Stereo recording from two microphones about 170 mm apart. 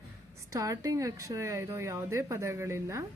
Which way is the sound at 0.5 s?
20° right (ahead or behind).